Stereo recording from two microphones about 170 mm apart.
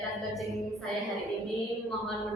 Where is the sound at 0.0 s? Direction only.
Centre (ahead or behind).